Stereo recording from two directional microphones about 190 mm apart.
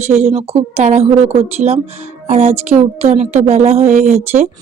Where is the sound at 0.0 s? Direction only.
35° right (ahead or behind).